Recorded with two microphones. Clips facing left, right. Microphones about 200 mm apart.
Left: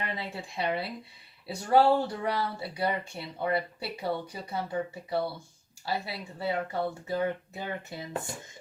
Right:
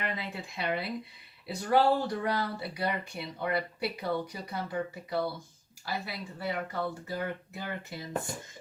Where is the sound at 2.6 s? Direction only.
25° left (ahead or behind).